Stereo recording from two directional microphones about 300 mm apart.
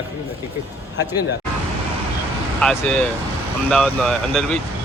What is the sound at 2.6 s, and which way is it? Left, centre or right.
Speech, centre.